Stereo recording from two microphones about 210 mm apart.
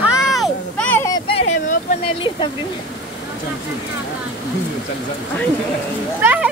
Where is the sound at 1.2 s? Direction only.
30° left (ahead or behind).